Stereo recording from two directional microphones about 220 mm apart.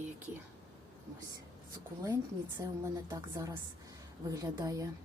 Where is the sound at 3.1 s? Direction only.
15° right (ahead or behind).